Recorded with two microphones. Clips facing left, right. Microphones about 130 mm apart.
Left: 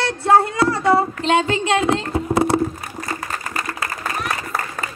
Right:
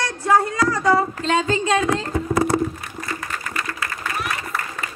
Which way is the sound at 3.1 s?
40° left (ahead or behind).